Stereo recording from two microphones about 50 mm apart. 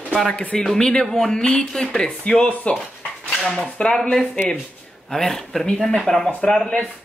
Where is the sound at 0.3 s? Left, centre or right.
Left.